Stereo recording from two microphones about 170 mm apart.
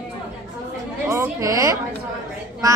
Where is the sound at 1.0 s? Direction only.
15° right (ahead or behind).